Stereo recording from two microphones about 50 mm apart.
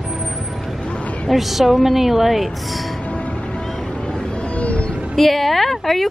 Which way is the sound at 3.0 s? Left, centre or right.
Left.